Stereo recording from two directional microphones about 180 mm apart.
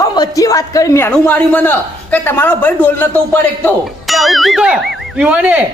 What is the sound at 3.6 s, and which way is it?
Speech, centre (ahead or behind).